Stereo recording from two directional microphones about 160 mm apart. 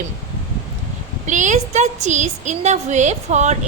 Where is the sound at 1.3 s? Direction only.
50° right (ahead or behind).